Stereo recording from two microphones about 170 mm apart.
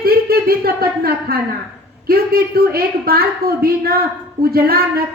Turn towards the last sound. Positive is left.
turn(degrees=-65)  # may be behind; listen again after turning